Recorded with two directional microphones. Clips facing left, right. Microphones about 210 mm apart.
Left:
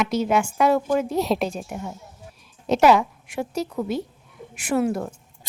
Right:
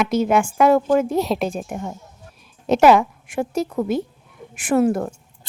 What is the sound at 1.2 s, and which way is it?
Speech, centre (ahead or behind).